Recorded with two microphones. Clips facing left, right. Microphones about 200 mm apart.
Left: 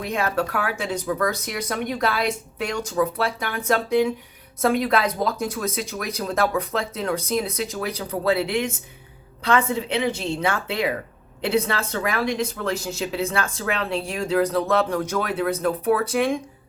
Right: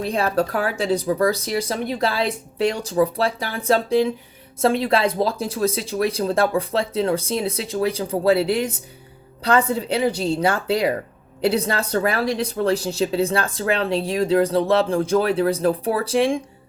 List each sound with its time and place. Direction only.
0.0 s speech: 35° right (ahead or behind)